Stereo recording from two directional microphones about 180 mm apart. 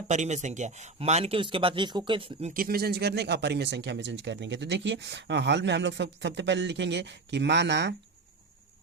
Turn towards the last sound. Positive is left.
turn(degrees=-75)  # may be behind; listen again after turning